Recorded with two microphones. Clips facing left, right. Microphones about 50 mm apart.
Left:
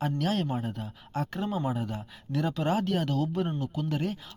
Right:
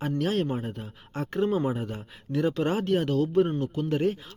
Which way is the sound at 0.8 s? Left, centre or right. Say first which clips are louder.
Left 1 dB; right.